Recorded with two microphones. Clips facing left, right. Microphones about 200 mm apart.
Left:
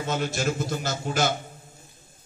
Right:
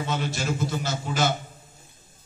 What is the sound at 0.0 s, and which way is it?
A man's voice, 45° left (ahead or behind).